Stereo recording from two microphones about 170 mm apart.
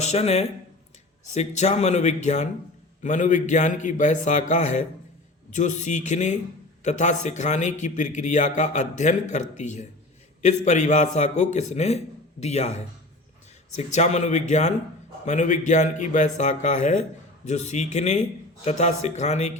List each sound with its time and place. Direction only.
0.0 s a man's voice: 40° left (ahead or behind)